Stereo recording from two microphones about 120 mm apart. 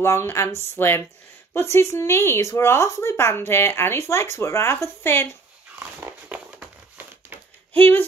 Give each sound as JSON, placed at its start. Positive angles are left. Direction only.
{"t": 0.0, "sound": "speech", "side_deg": 25}
{"t": 5.8, "sound": "crumpling", "side_deg": -15}
{"t": 7.7, "sound": "speech", "side_deg": 15}